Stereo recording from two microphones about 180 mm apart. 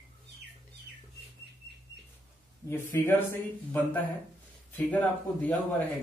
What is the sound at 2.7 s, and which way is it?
Speech, 10° left (ahead or behind).